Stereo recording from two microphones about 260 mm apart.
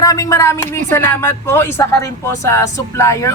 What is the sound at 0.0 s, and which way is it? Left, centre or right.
Speech, centre.